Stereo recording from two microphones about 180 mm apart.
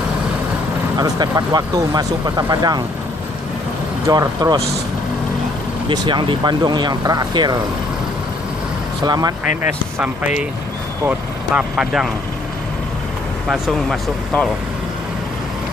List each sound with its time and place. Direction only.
0.9 s speech: 20° right (ahead or behind)
4.0 s speech: 20° right (ahead or behind)
5.9 s speech: 25° right (ahead or behind)
9.0 s speech: 20° right (ahead or behind)
11.0 s speech: 5° right (ahead or behind)
13.5 s speech: centre (ahead or behind)